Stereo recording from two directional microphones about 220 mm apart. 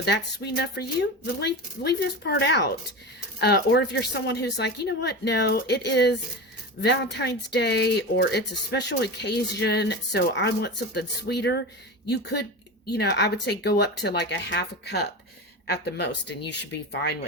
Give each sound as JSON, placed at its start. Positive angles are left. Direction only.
{"t": 0.4, "sound": "speech", "side_deg": 50}